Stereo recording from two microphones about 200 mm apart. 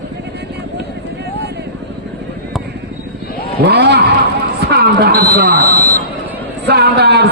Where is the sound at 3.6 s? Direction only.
55° right (ahead or behind).